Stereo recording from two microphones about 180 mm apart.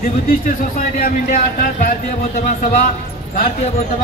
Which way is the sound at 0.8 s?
50° left (ahead or behind).